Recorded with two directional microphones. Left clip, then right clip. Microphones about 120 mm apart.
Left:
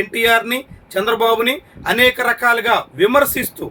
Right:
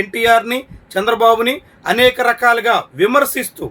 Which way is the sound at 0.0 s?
25° right (ahead or behind).